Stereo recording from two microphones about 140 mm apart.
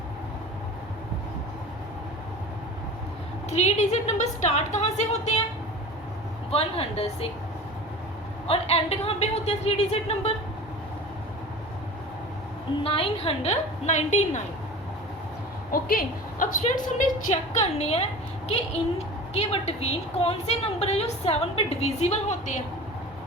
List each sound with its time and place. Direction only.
3.5 s a woman's voice: 55° left (ahead or behind)
6.5 s a woman's voice: 45° left (ahead or behind)
8.4 s a woman's voice: 45° left (ahead or behind)
12.8 s a woman's voice: 40° left (ahead or behind); by 14.4 s 55° left (ahead or behind)
15.7 s a woman's voice: 90° left; by 22.6 s 60° left (ahead or behind)